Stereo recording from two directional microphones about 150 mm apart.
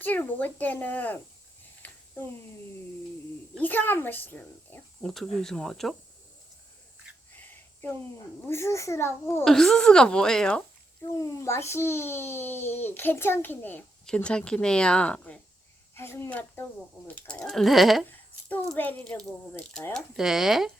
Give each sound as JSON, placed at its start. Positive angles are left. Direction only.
{"t": 0.0, "sound": "a child's voice", "side_deg": 10}
{"t": 1.8, "sound": "a sound", "side_deg": 10}
{"t": 3.6, "sound": "a child's voice", "side_deg": 15}
{"t": 5.1, "sound": "speech", "side_deg": 0}
{"t": 7.3, "sound": "a sound", "side_deg": 15}
{"t": 8.4, "sound": "a child's voice", "side_deg": 20}
{"t": 9.4, "sound": "speech", "side_deg": 5}
{"t": 11.1, "sound": "a child's voice", "side_deg": 20}
{"t": 18.1, "sound": "a child's voice", "side_deg": 10}